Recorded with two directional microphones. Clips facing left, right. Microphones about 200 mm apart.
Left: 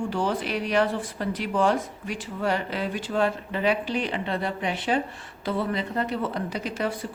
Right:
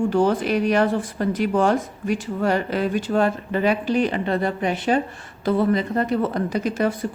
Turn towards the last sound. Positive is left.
turn(degrees=-45)  # may be behind; listen again after turning